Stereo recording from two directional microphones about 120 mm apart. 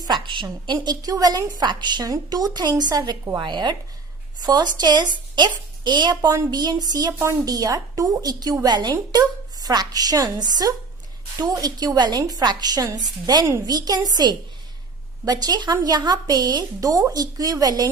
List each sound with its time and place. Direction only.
0.0 s a woman's voice: 40° right (ahead or behind)
13.4 s a woman's voice: 25° right (ahead or behind)
13.7 s speech: 35° right (ahead or behind)